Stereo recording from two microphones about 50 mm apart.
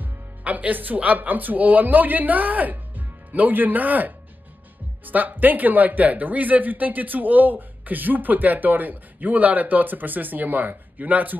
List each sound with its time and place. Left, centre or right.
0.0 s speech: right